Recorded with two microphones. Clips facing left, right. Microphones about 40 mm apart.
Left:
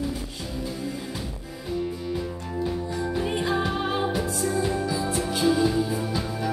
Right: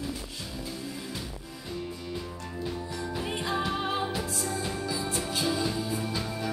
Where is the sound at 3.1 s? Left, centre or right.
Centre.